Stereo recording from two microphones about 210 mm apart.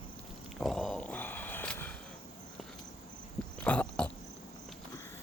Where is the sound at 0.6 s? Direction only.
Centre (ahead or behind).